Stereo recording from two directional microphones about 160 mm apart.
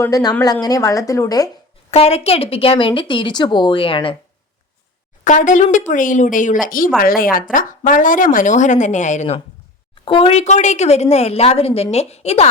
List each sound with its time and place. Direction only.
0.0 s speech: 25° left (ahead or behind)
1.9 s a woman's voice: 40° left (ahead or behind)
5.2 s a woman's voice: 50° left (ahead or behind)
9.9 s a woman's voice: 35° left (ahead or behind)